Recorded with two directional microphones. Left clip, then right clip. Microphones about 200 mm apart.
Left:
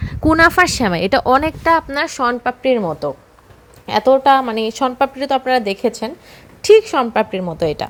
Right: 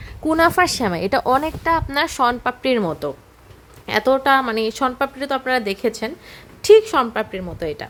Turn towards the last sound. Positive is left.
turn(degrees=25)  # may be behind; listen again after turning